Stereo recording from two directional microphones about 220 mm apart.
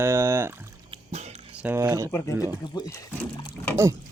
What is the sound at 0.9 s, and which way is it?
Drip, 30° right (ahead or behind).